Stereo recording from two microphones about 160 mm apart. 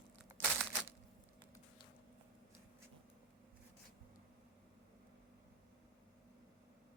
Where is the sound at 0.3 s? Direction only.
15° right (ahead or behind).